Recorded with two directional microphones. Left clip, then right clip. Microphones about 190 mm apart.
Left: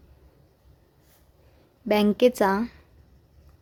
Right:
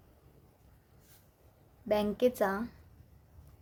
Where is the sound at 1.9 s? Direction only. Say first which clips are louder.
Left 9 dB; 35° left (ahead or behind).